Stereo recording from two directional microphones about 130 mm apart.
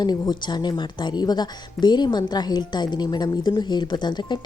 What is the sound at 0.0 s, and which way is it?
A woman's voice, 30° left (ahead or behind).